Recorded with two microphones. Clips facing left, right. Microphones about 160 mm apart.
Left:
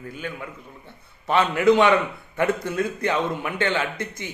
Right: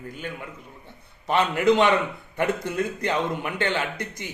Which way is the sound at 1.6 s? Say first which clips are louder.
Left 3 dB; 20° right (ahead or behind).